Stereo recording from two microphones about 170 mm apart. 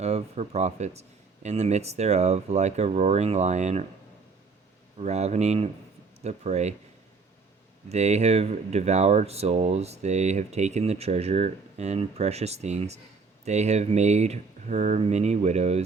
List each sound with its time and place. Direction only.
0.0 s speech: 40° right (ahead or behind)
4.9 s speech: 40° right (ahead or behind)
7.9 s speech: 40° right (ahead or behind)